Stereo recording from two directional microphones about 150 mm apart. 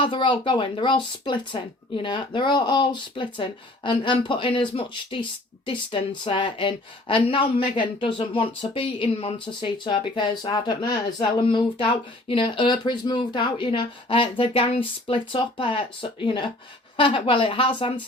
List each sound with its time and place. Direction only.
0.0 s speech: 30° left (ahead or behind)